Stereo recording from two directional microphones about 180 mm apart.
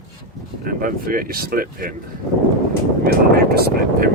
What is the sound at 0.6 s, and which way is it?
Speech, 50° right (ahead or behind).